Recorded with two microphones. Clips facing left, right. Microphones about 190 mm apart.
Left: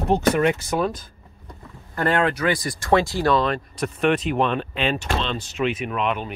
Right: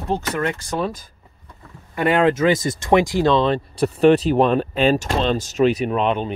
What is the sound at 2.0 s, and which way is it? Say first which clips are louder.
Speech: right 4 dB; 15° right (ahead or behind).